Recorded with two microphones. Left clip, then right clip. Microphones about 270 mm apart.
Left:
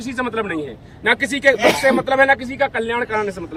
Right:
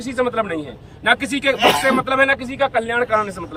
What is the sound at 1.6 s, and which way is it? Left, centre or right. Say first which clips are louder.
Speech: right 1 dB; centre.